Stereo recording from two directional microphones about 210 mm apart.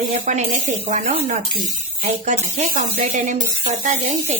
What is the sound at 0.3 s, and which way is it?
Speech, 35° right (ahead or behind).